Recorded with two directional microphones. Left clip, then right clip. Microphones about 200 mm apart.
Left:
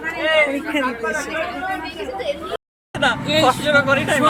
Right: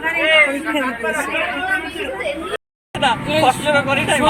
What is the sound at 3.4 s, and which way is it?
Speech, 25° left (ahead or behind).